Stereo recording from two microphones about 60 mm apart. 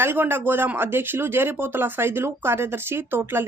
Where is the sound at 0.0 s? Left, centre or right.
Right.